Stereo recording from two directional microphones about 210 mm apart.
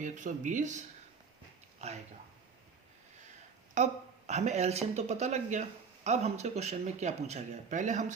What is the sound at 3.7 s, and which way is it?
Speech, 35° right (ahead or behind).